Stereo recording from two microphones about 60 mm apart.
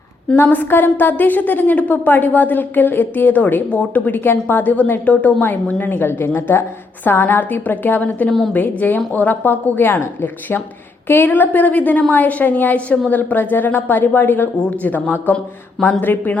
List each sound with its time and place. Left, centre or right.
0.5 s a woman's voice: left